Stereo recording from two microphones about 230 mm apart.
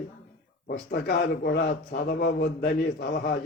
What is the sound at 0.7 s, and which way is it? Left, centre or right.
A man's voice, left.